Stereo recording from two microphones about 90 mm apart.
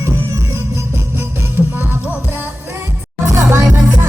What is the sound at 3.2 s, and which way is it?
Music, 35° right (ahead or behind).